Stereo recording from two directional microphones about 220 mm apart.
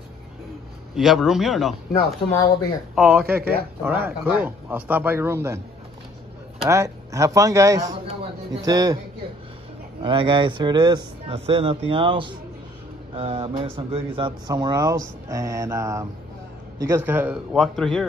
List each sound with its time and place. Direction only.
0.9 s a man's voice: centre (ahead or behind)
2.9 s a man's voice: 5° right (ahead or behind)
6.7 s speech: 15° right (ahead or behind)
8.1 s a sound: 20° right (ahead or behind)
10.0 s a man's voice: 20° right (ahead or behind); by 18.0 s centre (ahead or behind)